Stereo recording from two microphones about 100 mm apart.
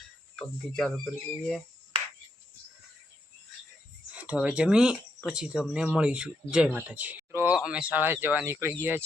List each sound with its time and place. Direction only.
0.8 s speech: 5° left (ahead or behind)
4.1 s a sound: 10° right (ahead or behind)
4.4 s speech: 10° right (ahead or behind)